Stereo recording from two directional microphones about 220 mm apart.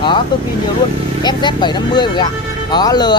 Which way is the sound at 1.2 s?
20° left (ahead or behind).